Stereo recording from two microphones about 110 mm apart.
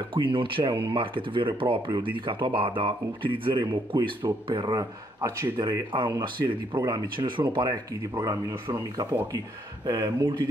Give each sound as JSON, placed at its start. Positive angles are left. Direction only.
{"t": 0.1, "sound": "speech", "side_deg": -50}
{"t": 9.8, "sound": "speech", "side_deg": -40}